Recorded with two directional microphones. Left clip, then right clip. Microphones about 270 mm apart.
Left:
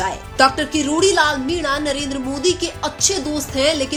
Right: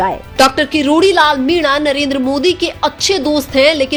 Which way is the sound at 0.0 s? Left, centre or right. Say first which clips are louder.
Right 4 dB; right.